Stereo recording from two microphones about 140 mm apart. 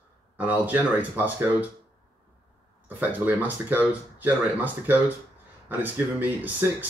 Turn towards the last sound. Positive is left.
turn(degrees=-10)  # may be behind; listen again after turning